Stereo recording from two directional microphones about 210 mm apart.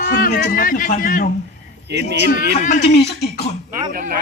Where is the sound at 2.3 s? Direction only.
40° left (ahead or behind).